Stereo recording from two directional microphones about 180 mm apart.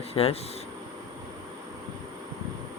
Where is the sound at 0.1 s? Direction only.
35° left (ahead or behind).